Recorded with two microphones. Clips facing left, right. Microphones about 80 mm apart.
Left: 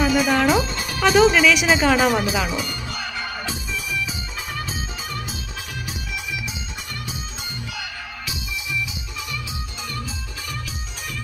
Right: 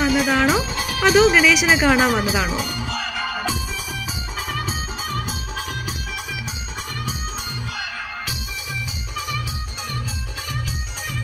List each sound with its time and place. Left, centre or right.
0.0 s speech: centre
2.9 s music: right